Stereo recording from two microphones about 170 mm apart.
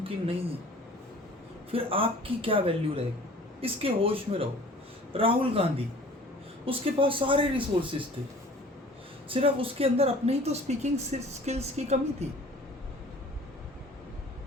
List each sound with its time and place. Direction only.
0.0 s speech: 35° right (ahead or behind)
1.7 s speech: 35° right (ahead or behind)
9.3 s speech: 35° right (ahead or behind)